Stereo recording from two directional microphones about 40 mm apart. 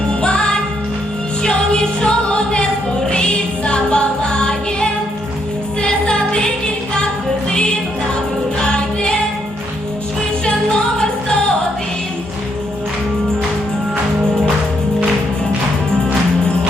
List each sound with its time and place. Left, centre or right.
0.1 s music: left
1.5 s music: left
8.6 s music: left
10.4 s music: left